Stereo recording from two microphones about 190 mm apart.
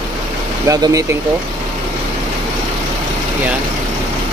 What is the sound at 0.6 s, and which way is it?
Speech, 20° right (ahead or behind).